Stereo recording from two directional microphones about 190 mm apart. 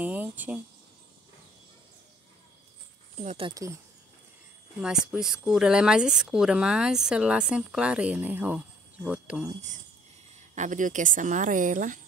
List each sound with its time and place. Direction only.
0.0 s speech: 10° right (ahead or behind)
3.2 s speech: 30° right (ahead or behind)
4.8 s speech: 5° right (ahead or behind)
10.5 s a woman's voice: 40° right (ahead or behind)